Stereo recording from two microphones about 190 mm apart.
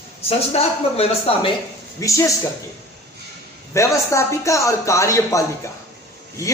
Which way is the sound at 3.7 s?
15° left (ahead or behind).